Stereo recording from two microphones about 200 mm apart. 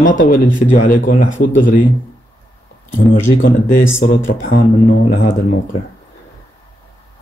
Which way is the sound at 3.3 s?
45° left (ahead or behind).